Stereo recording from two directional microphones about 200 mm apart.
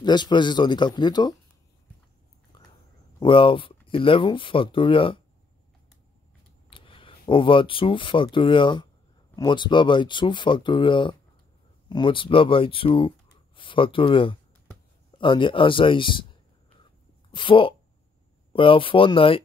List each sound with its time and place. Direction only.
0.0 s speech: 20° left (ahead or behind)
2.5 s a sound: 25° left (ahead or behind)
3.2 s speech: 25° left (ahead or behind)
6.7 s speech: 25° left (ahead or behind)
17.3 s speech: 25° left (ahead or behind)